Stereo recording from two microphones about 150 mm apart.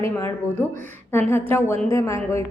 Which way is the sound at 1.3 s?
15° left (ahead or behind).